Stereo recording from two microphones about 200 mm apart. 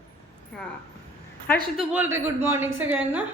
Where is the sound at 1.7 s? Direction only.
10° right (ahead or behind).